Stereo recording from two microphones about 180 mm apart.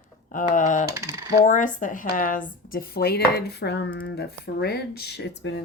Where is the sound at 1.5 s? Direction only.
45° left (ahead or behind).